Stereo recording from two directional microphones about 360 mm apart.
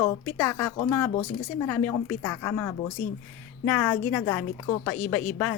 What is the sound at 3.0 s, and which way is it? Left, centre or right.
Speech, left.